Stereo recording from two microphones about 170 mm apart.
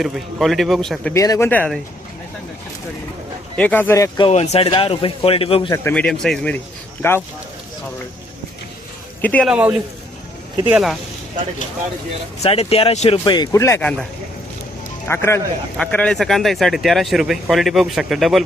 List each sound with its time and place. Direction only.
0.0 s speech: centre (ahead or behind)
1.1 s a man's voice: 20° left (ahead or behind)
3.6 s a man's voice: 10° left (ahead or behind)
4.3 s speech: 40° left (ahead or behind)
5.7 s a man's voice: 10° left (ahead or behind)
9.2 s a man's voice: 10° left (ahead or behind)
9.5 s a man's voice: 10° right (ahead or behind)
12.4 s speech: 35° left (ahead or behind)
13.2 s speech: 25° left (ahead or behind)
15.0 s a man's voice: 15° left (ahead or behind); by 18.4 s centre (ahead or behind)